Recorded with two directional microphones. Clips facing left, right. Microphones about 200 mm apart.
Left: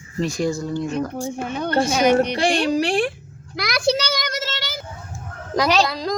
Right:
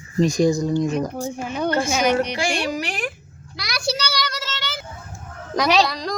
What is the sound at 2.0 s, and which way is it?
Speech, 45° left (ahead or behind).